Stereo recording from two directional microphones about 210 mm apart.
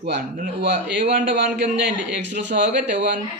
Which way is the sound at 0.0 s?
45° right (ahead or behind).